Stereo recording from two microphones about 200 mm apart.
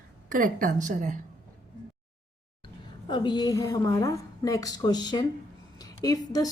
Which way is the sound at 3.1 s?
20° left (ahead or behind).